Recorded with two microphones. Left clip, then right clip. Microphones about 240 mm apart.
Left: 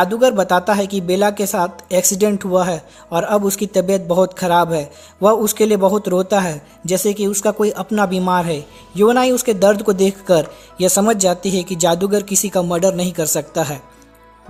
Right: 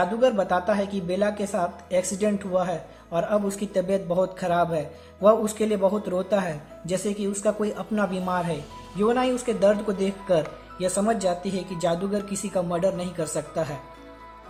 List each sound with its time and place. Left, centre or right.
0.0 s speech: left